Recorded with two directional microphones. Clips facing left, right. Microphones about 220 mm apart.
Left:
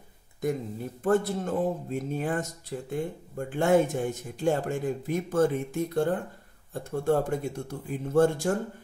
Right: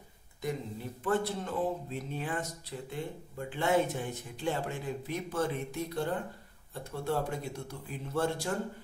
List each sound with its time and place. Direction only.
1.0 s speech: 45° left (ahead or behind)